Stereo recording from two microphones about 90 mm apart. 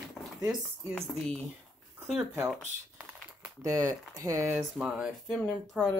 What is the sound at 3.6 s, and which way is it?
Speech, 40° right (ahead or behind).